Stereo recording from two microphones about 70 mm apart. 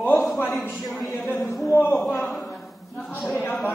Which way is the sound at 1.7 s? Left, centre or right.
Left.